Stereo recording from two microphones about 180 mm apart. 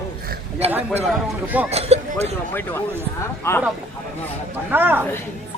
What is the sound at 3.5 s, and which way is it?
Speech, 15° left (ahead or behind).